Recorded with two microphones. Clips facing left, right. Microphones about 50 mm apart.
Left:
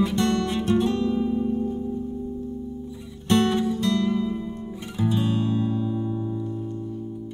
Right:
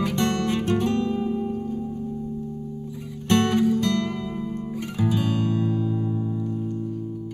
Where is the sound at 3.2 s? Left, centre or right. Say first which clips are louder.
Right 1 dB; right.